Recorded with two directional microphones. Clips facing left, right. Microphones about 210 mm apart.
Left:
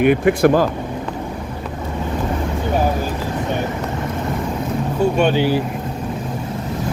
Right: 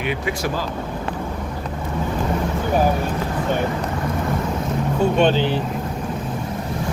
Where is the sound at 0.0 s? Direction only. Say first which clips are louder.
Left 11 dB; 55° left (ahead or behind).